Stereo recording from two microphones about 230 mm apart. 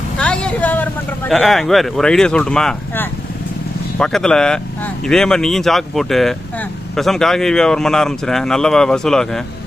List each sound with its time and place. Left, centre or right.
0.2 s speech: centre